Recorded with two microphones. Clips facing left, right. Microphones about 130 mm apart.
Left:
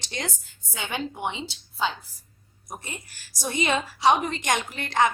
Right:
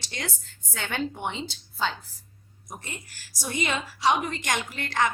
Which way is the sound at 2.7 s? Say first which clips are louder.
Left 2 dB; 15° left (ahead or behind).